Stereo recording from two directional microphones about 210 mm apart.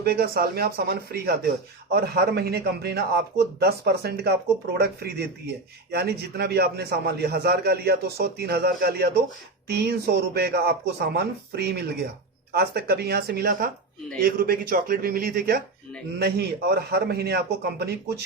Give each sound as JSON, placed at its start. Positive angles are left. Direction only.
{"t": 0.0, "sound": "a man's voice", "side_deg": -50}